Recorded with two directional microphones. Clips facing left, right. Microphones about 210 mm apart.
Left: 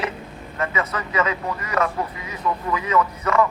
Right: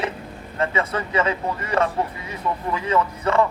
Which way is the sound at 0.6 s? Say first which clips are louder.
Right 2 dB; 30° right (ahead or behind).